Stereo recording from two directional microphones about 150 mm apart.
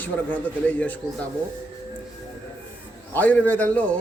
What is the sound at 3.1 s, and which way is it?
Speech, 10° left (ahead or behind).